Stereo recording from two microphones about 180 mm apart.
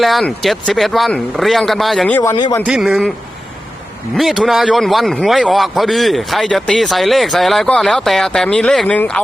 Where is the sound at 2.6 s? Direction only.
Centre (ahead or behind).